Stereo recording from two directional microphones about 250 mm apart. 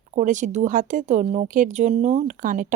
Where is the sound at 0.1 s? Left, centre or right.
Right.